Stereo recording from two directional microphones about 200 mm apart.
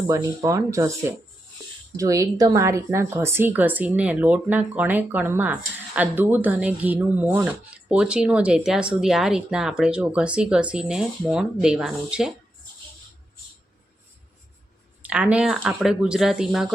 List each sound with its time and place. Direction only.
0.1 s speech: 15° right (ahead or behind)
2.0 s speech: 15° right (ahead or behind)
15.0 s speech: 5° right (ahead or behind)